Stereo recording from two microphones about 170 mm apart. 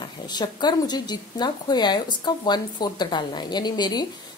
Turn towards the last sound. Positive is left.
turn(degrees=25)  # may be behind; listen again after turning